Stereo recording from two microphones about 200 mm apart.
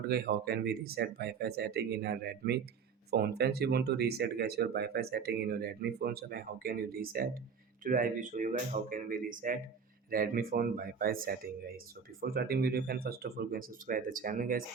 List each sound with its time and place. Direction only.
0.0 s speech: 50° right (ahead or behind)